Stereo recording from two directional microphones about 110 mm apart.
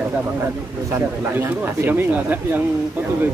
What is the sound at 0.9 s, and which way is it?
Speech, 25° right (ahead or behind).